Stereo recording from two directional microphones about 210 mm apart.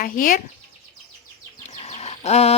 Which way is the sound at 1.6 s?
30° left (ahead or behind).